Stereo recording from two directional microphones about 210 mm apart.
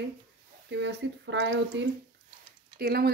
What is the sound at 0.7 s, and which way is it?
Speech, 55° right (ahead or behind).